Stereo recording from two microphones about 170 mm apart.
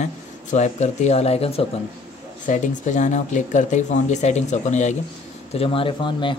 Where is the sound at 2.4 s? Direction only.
45° left (ahead or behind); by 6.3 s 30° left (ahead or behind).